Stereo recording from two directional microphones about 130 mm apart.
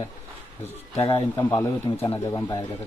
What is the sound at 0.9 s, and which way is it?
Speech, 40° left (ahead or behind).